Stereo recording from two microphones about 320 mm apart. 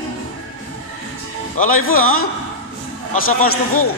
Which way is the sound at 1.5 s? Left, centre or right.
Left.